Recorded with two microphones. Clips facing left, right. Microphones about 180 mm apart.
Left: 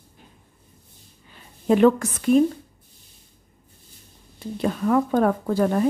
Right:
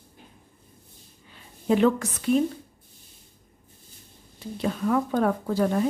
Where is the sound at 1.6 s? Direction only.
50° left (ahead or behind).